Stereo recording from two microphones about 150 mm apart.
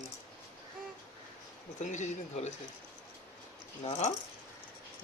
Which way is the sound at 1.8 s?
55° left (ahead or behind).